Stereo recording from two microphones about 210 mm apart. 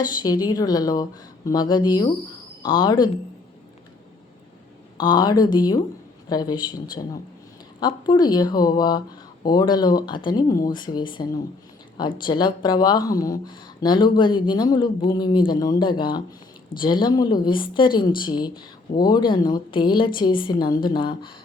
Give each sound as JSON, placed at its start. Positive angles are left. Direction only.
{"t": 0.0, "sound": "speech", "side_deg": 20}
{"t": 4.9, "sound": "speech", "side_deg": 20}
{"t": 7.8, "sound": "speech", "side_deg": 20}